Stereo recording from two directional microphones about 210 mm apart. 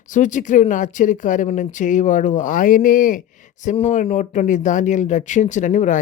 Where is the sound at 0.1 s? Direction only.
35° left (ahead or behind).